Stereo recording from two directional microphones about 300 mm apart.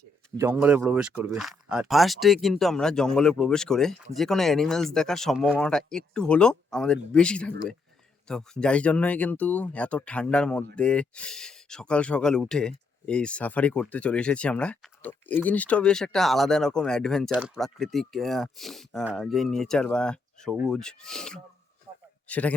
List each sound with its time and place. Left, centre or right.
0.3 s speech: centre
21.9 s a sound: centre
22.3 s a man's voice: centre